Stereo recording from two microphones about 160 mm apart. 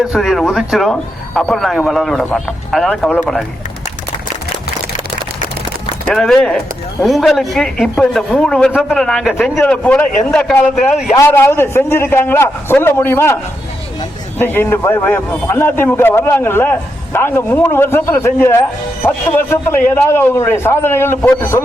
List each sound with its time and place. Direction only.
0.0 s a man's voice: centre (ahead or behind)
6.1 s a man's voice: centre (ahead or behind)
11.2 s a man's voice: 15° left (ahead or behind)